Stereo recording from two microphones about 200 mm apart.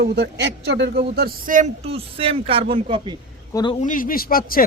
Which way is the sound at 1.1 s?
45° right (ahead or behind).